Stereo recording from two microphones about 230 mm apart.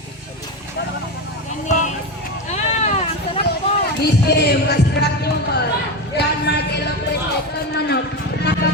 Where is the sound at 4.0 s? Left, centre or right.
Left.